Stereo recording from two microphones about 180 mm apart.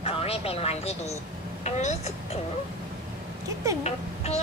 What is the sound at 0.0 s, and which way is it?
A woman's voice, 35° left (ahead or behind).